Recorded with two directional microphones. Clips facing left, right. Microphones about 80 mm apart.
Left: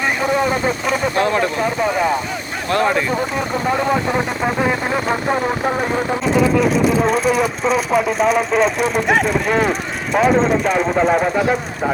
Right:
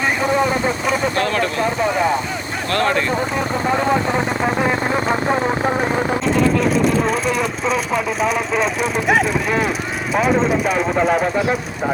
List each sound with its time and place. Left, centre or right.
1.1 s speech: left
2.7 s speech: centre